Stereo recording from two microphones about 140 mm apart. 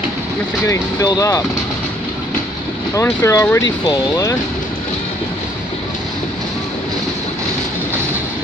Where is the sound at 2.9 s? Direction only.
20° left (ahead or behind).